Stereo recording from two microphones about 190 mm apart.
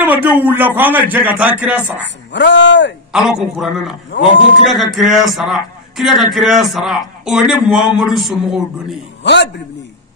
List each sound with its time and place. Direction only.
0.0 s a man's voice: 10° right (ahead or behind)
2.3 s speech: 70° left (ahead or behind)
3.1 s a man's voice: 5° right (ahead or behind)
9.2 s a man's voice: 65° left (ahead or behind)